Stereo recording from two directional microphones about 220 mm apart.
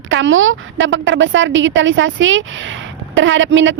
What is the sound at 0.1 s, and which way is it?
Speech, 60° right (ahead or behind).